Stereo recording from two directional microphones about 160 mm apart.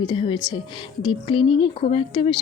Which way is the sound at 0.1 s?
30° left (ahead or behind).